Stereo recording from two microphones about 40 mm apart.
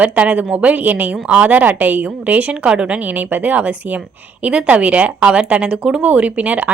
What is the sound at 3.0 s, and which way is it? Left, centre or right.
Speech, right.